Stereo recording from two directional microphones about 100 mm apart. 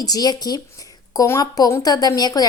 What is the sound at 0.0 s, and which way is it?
A woman's voice, 40° left (ahead or behind).